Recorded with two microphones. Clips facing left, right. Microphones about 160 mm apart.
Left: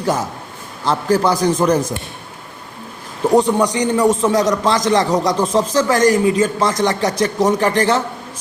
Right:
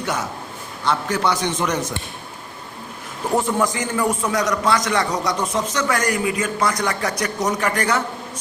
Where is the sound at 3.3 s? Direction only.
20° left (ahead or behind).